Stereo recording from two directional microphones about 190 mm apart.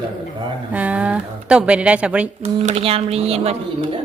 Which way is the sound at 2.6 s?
35° right (ahead or behind).